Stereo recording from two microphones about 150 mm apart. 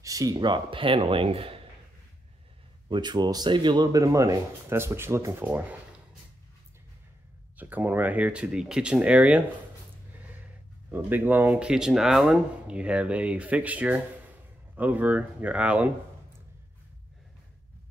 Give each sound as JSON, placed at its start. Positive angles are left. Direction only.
{"t": 0.0, "sound": "speech", "side_deg": -25}
{"t": 2.9, "sound": "speech", "side_deg": -30}
{"t": 7.5, "sound": "speech", "side_deg": -10}
{"t": 10.9, "sound": "speech", "side_deg": -10}